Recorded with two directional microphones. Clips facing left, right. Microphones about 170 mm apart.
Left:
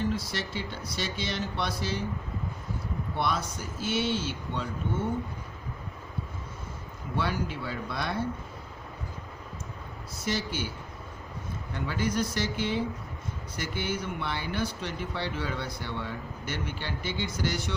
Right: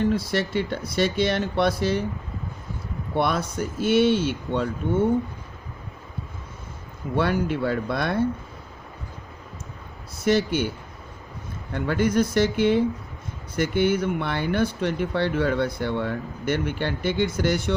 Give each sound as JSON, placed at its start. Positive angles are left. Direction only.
{"t": 0.0, "sound": "speech", "side_deg": -60}
{"t": 3.2, "sound": "speech", "side_deg": -55}
{"t": 7.2, "sound": "speech", "side_deg": -60}
{"t": 10.2, "sound": "speech", "side_deg": -60}
{"t": 11.7, "sound": "speech", "side_deg": -55}